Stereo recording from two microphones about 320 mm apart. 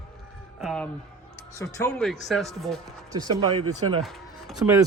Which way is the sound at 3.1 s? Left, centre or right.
Centre.